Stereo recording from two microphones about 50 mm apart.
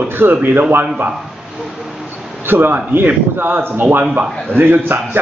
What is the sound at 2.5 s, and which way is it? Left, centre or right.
Speech, right.